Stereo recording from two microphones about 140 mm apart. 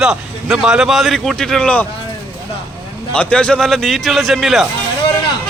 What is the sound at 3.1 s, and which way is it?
Speech, 5° left (ahead or behind).